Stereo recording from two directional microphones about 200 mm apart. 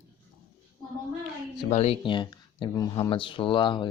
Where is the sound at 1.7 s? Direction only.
35° left (ahead or behind).